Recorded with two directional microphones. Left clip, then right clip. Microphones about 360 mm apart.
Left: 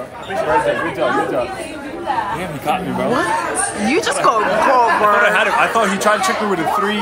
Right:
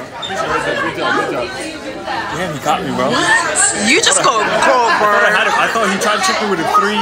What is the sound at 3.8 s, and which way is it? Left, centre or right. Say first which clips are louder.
Speech: right 3 dB; centre.